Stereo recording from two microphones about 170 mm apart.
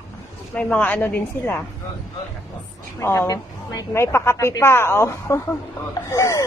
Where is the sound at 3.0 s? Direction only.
15° left (ahead or behind).